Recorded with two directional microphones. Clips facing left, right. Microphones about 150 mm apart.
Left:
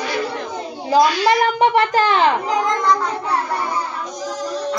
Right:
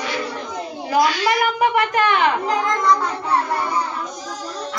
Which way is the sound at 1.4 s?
30° left (ahead or behind).